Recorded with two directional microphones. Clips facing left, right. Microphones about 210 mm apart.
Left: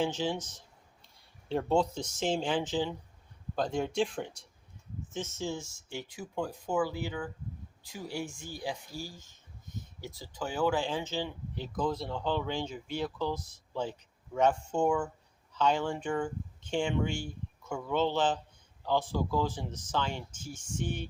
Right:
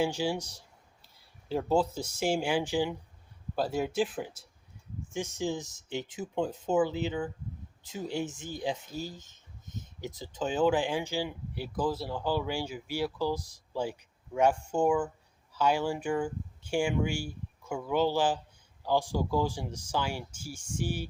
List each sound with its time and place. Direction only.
0.0 s speech: 10° right (ahead or behind)